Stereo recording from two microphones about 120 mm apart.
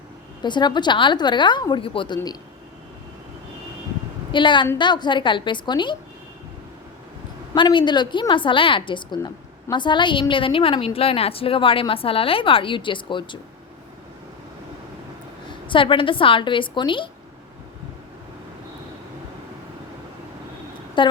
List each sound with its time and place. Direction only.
0.4 s a woman's voice: 40° left (ahead or behind)
4.3 s a woman's voice: 40° left (ahead or behind)
7.5 s a woman's voice: 40° left (ahead or behind)
15.6 s a woman's voice: 45° left (ahead or behind)
21.0 s a woman's voice: 45° left (ahead or behind)